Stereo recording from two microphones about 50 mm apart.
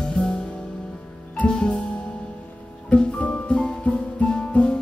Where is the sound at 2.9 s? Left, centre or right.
Left.